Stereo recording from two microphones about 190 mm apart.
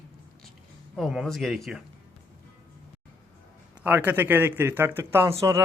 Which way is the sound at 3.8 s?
10° right (ahead or behind).